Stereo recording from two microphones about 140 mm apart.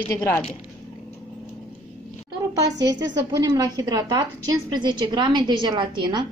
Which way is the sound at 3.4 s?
30° right (ahead or behind).